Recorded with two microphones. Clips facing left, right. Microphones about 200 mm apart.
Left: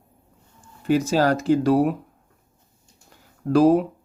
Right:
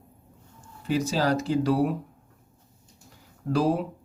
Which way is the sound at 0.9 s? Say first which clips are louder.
Left 5 dB; 50° left (ahead or behind).